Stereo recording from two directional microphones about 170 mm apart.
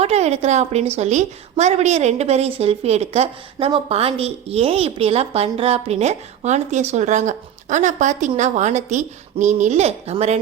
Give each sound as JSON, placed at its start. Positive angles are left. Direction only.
{"t": 0.0, "sound": "a woman's voice", "side_deg": -40}